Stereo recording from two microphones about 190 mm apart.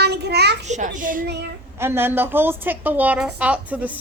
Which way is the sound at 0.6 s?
40° right (ahead or behind).